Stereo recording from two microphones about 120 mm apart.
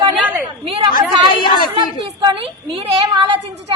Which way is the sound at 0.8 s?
45° right (ahead or behind).